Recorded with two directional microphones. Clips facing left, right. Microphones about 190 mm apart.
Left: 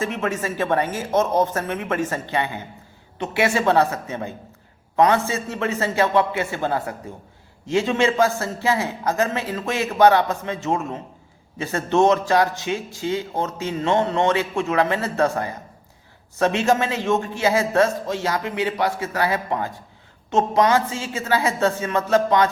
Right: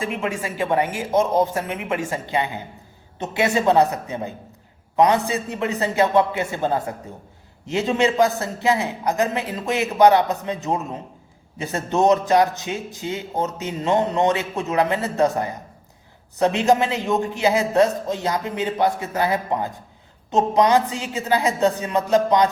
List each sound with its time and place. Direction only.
0.0 s a man's voice: 15° right (ahead or behind)
7.9 s a man's voice: 20° right (ahead or behind)
16.6 s a man's voice: 20° right (ahead or behind)